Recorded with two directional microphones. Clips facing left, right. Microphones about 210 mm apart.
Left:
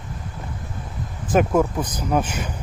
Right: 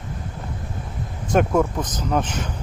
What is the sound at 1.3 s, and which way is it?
Speech, 5° left (ahead or behind).